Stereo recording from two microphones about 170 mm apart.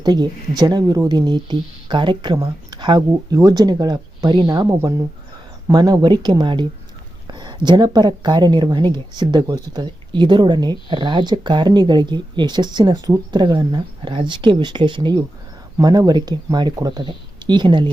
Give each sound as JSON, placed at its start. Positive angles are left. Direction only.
{"t": 0.0, "sound": "speech", "side_deg": -25}